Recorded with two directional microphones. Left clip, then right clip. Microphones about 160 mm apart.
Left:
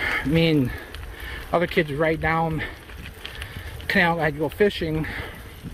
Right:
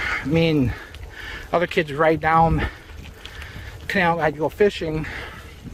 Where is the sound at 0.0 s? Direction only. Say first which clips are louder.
Right 1 dB; 25° right (ahead or behind).